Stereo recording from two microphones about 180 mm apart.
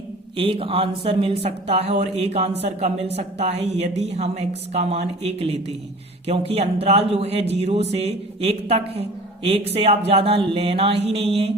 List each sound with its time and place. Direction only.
0.3 s a woman's voice: 30° right (ahead or behind)